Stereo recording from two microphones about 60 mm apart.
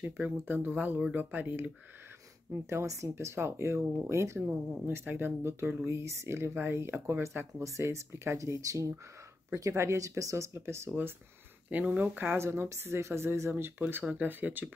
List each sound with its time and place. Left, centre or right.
0.0 s speech: right
2.6 s speech: right
4.6 s speech: centre
4.8 s speech: right
7.6 s speech: right
9.6 s speech: right
11.7 s speech: right
12.4 s speech: right